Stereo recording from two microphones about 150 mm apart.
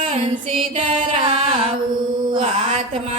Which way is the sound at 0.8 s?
40° right (ahead or behind).